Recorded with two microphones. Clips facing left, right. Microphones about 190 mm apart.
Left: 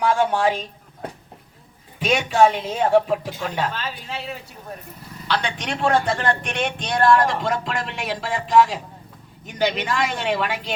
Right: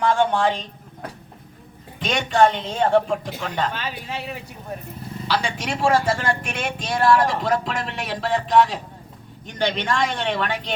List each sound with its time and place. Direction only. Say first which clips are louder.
0.0 s a sound: even; 5° left (ahead or behind)
2.0 s speech: left 1 dB; 5° left (ahead or behind)
3.8 s speech: right 1 dB; 15° right (ahead or behind)
5.3 s speech: even; 5° right (ahead or behind)